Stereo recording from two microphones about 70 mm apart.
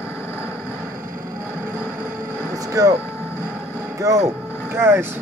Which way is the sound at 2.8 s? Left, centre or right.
Right.